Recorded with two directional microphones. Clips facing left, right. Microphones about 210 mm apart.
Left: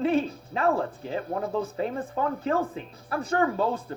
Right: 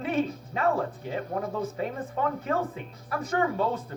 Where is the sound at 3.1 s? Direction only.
30° left (ahead or behind).